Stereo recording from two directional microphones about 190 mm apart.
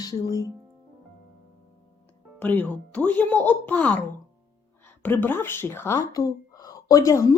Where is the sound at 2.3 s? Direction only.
10° left (ahead or behind).